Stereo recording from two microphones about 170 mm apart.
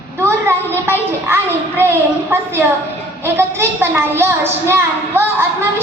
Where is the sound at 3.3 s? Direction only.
15° right (ahead or behind).